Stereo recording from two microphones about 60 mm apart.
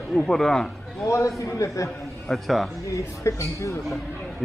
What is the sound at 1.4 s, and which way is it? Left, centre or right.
Speech, left.